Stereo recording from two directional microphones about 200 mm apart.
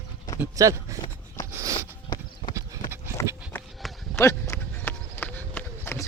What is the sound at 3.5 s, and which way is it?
Clip-clop, 10° left (ahead or behind).